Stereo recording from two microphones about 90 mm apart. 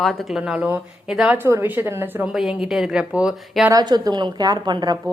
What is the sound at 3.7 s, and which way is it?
A woman's voice, 50° right (ahead or behind).